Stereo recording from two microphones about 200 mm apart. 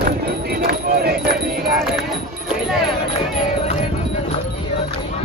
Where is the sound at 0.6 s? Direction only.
50° right (ahead or behind).